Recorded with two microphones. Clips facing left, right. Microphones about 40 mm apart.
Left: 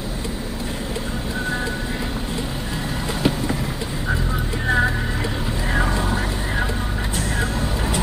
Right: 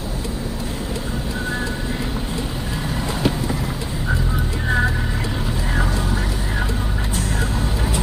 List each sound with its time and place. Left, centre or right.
3.2 s vehicle: centre
4.6 s music: centre
5.9 s vehicle: centre